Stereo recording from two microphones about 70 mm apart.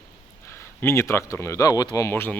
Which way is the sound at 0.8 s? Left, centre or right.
Left.